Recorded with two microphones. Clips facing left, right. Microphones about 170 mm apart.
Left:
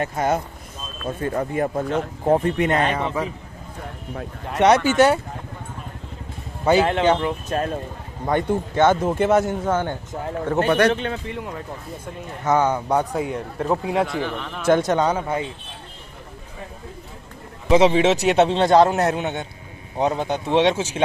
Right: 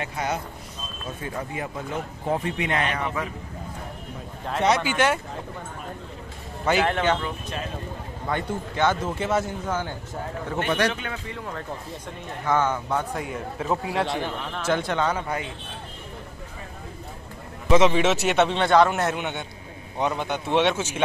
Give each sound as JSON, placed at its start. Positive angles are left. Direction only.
{"t": 0.0, "sound": "speech", "side_deg": 45}
{"t": 2.8, "sound": "a man's voice", "side_deg": 30}
{"t": 4.2, "sound": "speech", "side_deg": 70}
{"t": 4.8, "sound": "a man's voice", "side_deg": 40}
{"t": 6.6, "sound": "speech", "side_deg": 30}
{"t": 7.4, "sound": "speech", "side_deg": 50}
{"t": 10.9, "sound": "a man's voice", "side_deg": 30}
{"t": 12.7, "sound": "a man's voice", "side_deg": 40}
{"t": 13.1, "sound": "speech", "side_deg": 0}
{"t": 14.0, "sound": "speech", "side_deg": -20}
{"t": 14.7, "sound": "speech", "side_deg": 45}
{"t": 15.2, "sound": "speech", "side_deg": 25}
{"t": 17.6, "sound": "a man's voice", "side_deg": 30}